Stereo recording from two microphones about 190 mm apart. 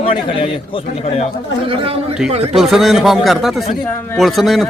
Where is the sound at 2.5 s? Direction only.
Centre (ahead or behind).